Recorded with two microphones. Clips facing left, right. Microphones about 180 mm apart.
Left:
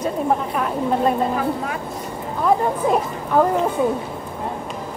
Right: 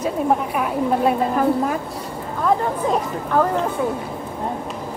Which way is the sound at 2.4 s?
10° left (ahead or behind).